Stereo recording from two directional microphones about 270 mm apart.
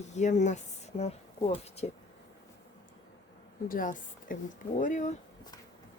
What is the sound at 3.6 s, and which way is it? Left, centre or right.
A woman's voice, left.